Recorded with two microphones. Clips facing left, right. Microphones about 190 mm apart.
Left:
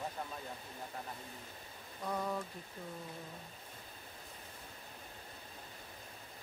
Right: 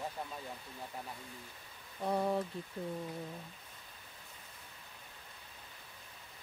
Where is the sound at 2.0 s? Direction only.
30° right (ahead or behind).